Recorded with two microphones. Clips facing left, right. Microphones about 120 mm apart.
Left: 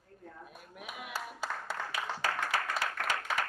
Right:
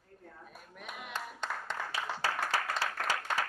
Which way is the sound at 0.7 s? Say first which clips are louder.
Left 1 dB; 5° left (ahead or behind).